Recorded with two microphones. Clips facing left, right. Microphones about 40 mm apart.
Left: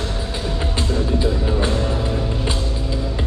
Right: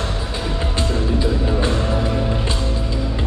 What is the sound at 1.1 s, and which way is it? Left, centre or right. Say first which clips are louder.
Music: even; centre.